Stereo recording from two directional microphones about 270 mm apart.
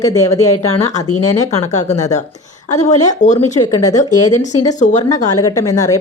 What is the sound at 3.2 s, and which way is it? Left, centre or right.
Speech, left.